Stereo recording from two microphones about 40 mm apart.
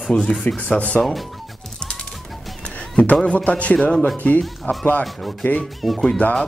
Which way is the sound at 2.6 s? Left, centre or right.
Left.